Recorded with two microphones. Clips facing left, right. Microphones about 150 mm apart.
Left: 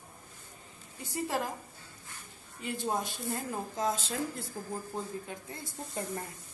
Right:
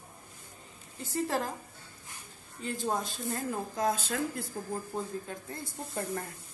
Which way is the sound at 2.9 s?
20° left (ahead or behind).